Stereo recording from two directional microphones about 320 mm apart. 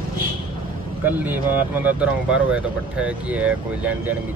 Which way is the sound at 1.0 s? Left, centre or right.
Centre.